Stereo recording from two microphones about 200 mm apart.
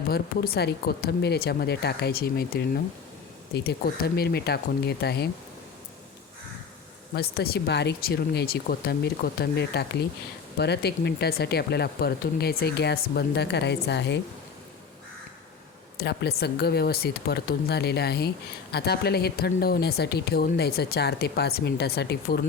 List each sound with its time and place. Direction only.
0.1 s speech: 50° left (ahead or behind)
7.1 s speech: 50° left (ahead or behind)
16.0 s speech: 55° left (ahead or behind)